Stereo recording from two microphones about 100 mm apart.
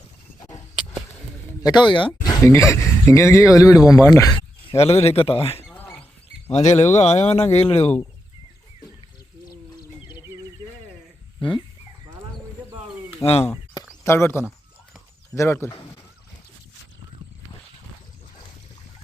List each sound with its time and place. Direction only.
1.6 s speech: 50° left (ahead or behind)
2.2 s speech: 25° left (ahead or behind)
4.9 s a man's voice: 85° left
5.7 s rodents: 15° left (ahead or behind)
6.5 s speech: 90° left
11.3 s speech: 55° left (ahead or behind)
13.2 s speech: 90° left
14.0 s speech: 25° left (ahead or behind)